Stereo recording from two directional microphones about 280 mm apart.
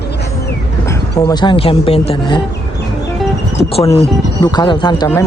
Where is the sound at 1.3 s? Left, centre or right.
Centre.